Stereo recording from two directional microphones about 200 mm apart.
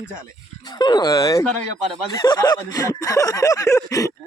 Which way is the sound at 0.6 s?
20° left (ahead or behind).